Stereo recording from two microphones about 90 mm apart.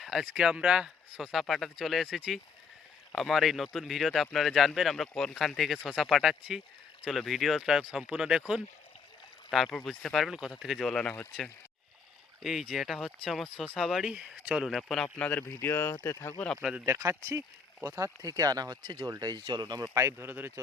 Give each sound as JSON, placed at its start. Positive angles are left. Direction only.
{"t": 0.0, "sound": "a sound", "side_deg": -5}
{"t": 0.3, "sound": "speech", "side_deg": -10}
{"t": 12.4, "sound": "speech", "side_deg": 0}
{"t": 15.2, "sound": "speech", "side_deg": 20}
{"t": 16.4, "sound": "speech", "side_deg": 10}
{"t": 16.8, "sound": "speech", "side_deg": -30}
{"t": 19.4, "sound": "speech", "side_deg": -55}
{"t": 19.8, "sound": "a man's voice", "side_deg": -30}